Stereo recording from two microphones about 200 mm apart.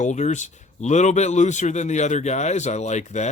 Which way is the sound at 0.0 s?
35° left (ahead or behind).